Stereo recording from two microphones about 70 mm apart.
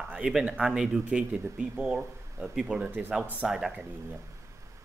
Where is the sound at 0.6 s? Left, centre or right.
Centre.